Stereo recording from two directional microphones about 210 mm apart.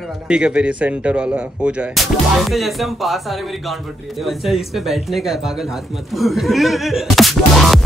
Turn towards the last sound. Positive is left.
turn(degrees=0)  # may be behind; listen again after turning